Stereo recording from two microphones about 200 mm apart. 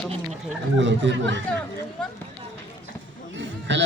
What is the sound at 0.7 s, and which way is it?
Speech, 65° right (ahead or behind).